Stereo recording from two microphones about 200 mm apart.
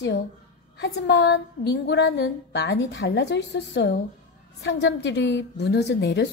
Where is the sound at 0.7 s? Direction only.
55° left (ahead or behind).